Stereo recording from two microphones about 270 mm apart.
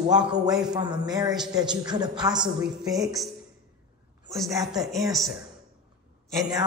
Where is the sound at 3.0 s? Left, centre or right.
Centre.